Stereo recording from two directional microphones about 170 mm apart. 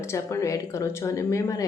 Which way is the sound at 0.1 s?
15° left (ahead or behind).